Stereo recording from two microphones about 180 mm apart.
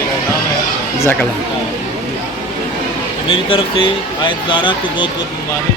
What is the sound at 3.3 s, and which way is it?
Speech, 30° left (ahead or behind).